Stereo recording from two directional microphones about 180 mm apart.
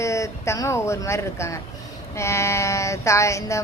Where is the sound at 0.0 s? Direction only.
15° left (ahead or behind).